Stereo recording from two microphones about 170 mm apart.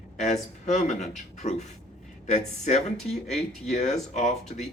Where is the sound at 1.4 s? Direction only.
40° left (ahead or behind).